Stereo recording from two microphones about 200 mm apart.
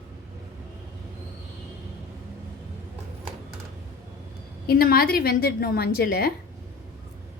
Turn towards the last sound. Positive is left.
turn(degrees=50)  # may be behind; listen again after turning